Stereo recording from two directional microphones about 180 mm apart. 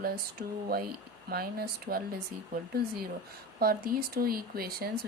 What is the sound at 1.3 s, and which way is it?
Speech, 55° right (ahead or behind).